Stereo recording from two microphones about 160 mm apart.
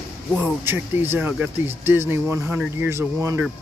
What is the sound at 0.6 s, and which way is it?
Speech, 15° right (ahead or behind).